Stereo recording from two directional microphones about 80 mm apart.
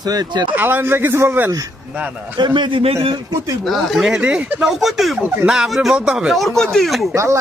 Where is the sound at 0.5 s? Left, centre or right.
Right.